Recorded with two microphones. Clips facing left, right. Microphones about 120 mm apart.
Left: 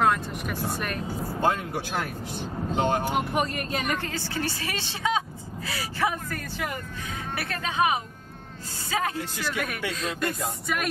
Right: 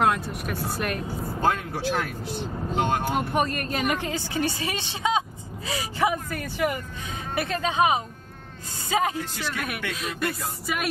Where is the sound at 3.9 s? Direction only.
15° right (ahead or behind).